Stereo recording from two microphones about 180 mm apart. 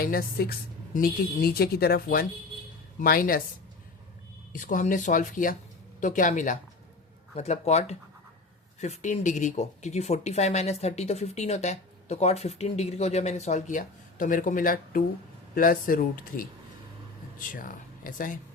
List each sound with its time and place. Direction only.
0.0 s speech: 55° left (ahead or behind)
4.5 s speech: 45° left (ahead or behind)
17.5 s speech: 50° left (ahead or behind)